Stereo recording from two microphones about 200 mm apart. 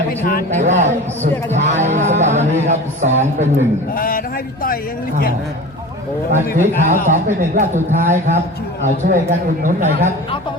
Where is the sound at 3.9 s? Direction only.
45° left (ahead or behind).